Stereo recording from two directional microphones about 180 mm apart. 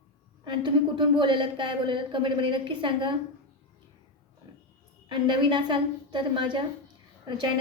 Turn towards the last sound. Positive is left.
turn(degrees=-25)  # may be behind; listen again after turning